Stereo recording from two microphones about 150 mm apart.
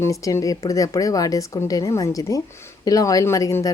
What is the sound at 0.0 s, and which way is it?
Speech, 20° left (ahead or behind).